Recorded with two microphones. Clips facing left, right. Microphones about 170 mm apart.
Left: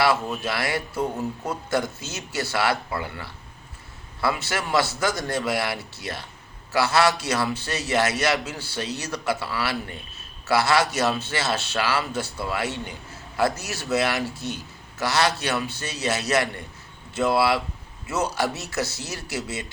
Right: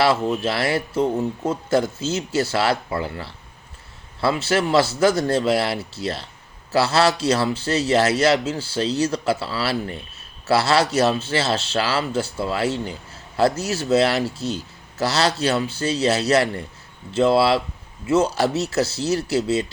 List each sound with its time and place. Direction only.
0.2 s speech: 25° right (ahead or behind)